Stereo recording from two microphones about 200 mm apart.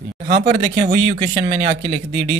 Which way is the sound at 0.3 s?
35° right (ahead or behind).